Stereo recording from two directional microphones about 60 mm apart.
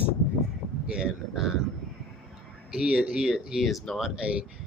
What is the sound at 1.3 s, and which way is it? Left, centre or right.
Speech, centre.